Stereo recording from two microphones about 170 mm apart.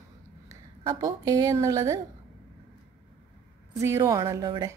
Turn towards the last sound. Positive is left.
turn(degrees=-20)  # may be behind; listen again after turning